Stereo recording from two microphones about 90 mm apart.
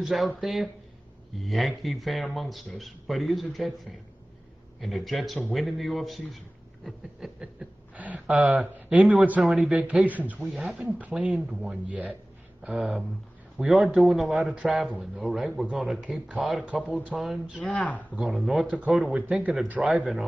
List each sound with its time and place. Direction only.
0.0 s speech: centre (ahead or behind)
4.7 s speech: centre (ahead or behind)
7.9 s a man's voice: 15° right (ahead or behind)
9.8 s speech: 15° right (ahead or behind)
16.6 s speech: 15° right (ahead or behind)
17.6 s speech: 15° left (ahead or behind)
18.1 s speech: 5° right (ahead or behind)
18.7 s speech: 15° right (ahead or behind)